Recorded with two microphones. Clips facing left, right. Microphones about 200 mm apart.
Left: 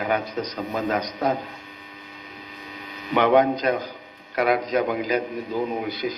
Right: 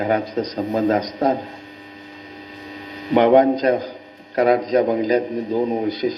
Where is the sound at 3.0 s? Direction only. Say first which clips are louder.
Right 5 dB; 30° right (ahead or behind).